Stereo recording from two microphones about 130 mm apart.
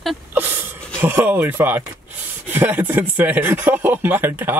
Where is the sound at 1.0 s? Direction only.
15° right (ahead or behind).